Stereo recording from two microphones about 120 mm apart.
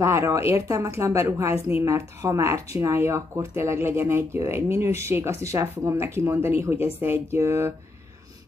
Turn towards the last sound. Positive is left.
turn(degrees=-20)  # may be behind; listen again after turning